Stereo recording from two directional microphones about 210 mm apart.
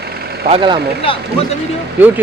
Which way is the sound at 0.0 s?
50° right (ahead or behind).